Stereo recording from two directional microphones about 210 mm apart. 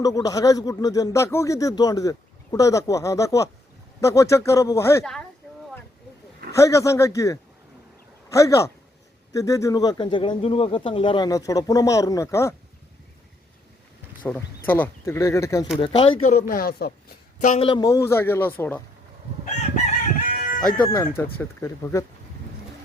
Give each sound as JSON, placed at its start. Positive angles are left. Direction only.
{"t": 0.0, "sound": "speech", "side_deg": 15}
{"t": 6.6, "sound": "speech", "side_deg": 15}
{"t": 14.2, "sound": "speech", "side_deg": 10}
{"t": 15.8, "sound": "speech", "side_deg": 25}
{"t": 17.4, "sound": "speech", "side_deg": 35}
{"t": 17.7, "sound": "speech", "side_deg": 20}
{"t": 19.7, "sound": "crowing", "side_deg": 40}
{"t": 20.8, "sound": "speech", "side_deg": 10}